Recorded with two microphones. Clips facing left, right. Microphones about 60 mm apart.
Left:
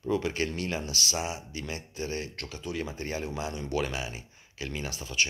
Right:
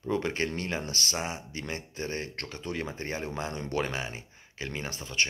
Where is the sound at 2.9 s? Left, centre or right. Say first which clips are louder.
Even; right.